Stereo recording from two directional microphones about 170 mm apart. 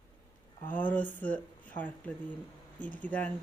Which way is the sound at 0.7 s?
10° left (ahead or behind).